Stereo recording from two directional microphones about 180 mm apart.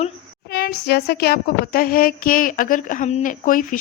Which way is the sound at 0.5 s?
60° left (ahead or behind).